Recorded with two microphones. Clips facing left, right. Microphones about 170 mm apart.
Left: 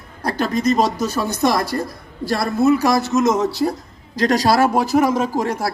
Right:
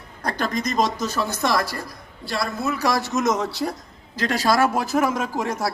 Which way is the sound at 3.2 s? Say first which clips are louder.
Left 3 dB; 25° left (ahead or behind).